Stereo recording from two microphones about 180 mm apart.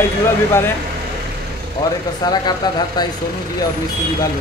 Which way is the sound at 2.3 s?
25° left (ahead or behind).